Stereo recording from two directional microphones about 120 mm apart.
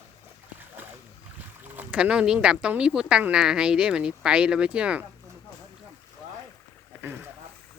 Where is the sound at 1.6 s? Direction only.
15° right (ahead or behind).